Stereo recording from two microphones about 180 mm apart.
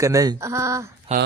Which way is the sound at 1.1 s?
40° right (ahead or behind).